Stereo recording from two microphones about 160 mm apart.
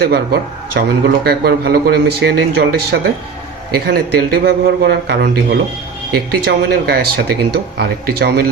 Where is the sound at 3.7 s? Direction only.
75° right (ahead or behind).